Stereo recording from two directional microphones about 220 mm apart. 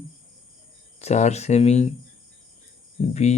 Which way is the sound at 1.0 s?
30° left (ahead or behind).